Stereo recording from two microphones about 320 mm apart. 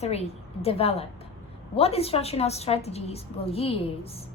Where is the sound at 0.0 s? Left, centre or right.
Centre.